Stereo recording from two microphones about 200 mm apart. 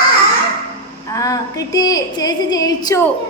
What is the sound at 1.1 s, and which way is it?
A woman's voice, 15° left (ahead or behind).